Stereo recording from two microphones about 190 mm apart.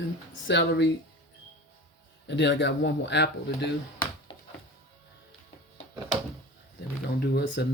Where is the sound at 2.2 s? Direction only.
70° left (ahead or behind).